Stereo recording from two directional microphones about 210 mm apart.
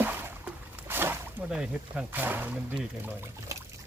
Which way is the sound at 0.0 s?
10° right (ahead or behind).